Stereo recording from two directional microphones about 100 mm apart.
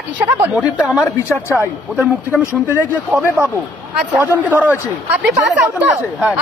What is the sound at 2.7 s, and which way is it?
Speech, 20° right (ahead or behind).